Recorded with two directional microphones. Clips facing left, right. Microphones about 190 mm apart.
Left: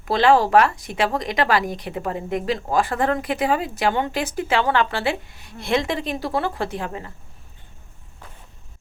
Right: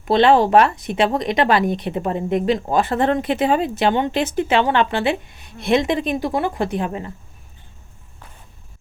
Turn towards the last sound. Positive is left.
turn(degrees=-20)  # may be behind; listen again after turning